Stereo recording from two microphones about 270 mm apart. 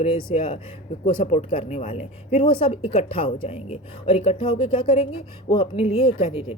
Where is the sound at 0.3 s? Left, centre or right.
Left.